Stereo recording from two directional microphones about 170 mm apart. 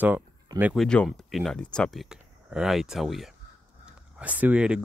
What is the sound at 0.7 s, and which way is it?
Speech, 5° left (ahead or behind).